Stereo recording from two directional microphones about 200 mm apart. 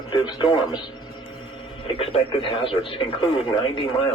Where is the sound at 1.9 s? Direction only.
25° left (ahead or behind).